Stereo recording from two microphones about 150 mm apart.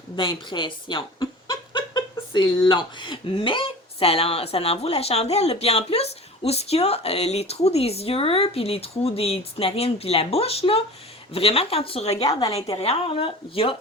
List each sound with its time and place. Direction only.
0.2 s speech: 30° left (ahead or behind)